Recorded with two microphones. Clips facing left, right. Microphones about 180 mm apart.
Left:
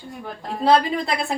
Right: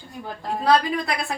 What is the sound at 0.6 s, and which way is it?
Speech, 25° left (ahead or behind).